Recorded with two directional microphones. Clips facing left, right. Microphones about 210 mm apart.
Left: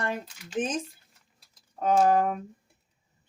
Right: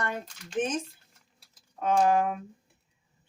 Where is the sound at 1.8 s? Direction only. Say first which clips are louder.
Left 2 dB; 40° left (ahead or behind).